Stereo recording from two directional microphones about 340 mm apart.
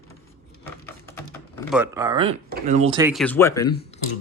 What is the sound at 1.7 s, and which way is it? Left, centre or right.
Speech, centre.